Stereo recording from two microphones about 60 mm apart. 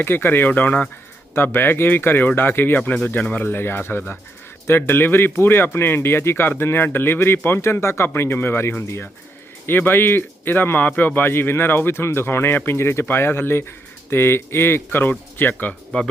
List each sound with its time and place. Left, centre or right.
0.0 s speech: left
1.4 s speech: left
3.4 s speech: left
15.9 s speech: left